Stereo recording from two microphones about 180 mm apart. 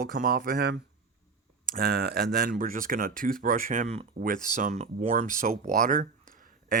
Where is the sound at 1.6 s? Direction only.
55° right (ahead or behind).